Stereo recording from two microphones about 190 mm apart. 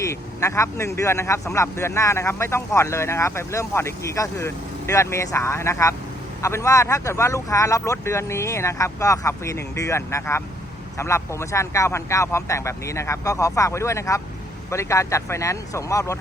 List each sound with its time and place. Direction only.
0.0 s speech: 15° left (ahead or behind)